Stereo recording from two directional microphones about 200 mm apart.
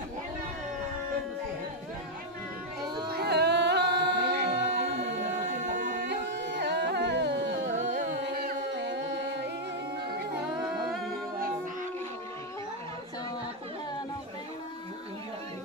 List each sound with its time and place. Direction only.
3.2 s a capella: 55° right (ahead or behind)
6.0 s carnatic music: 60° right (ahead or behind)
7.6 s a sound: 35° right (ahead or behind)
8.2 s music: 55° right (ahead or behind)